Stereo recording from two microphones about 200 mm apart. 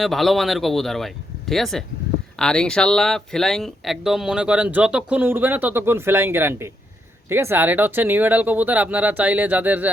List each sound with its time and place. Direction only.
0.0 s speech: centre (ahead or behind)